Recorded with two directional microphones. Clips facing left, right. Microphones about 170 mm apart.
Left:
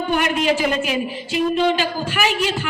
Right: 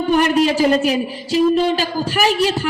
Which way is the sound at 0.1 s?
35° right (ahead or behind).